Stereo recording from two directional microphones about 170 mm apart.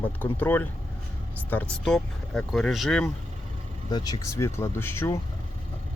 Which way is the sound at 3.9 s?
25° left (ahead or behind).